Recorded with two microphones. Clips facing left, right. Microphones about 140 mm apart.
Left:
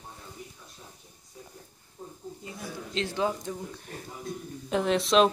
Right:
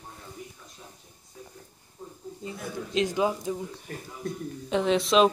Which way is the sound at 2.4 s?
15° right (ahead or behind).